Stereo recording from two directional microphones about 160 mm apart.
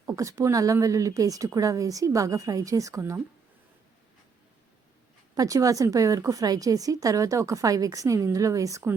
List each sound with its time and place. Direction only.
0.0 s a woman's voice: 20° right (ahead or behind)
5.3 s a woman's voice: 20° right (ahead or behind)